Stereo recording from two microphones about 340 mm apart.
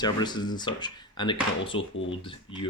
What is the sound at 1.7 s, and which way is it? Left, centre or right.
Speech, left.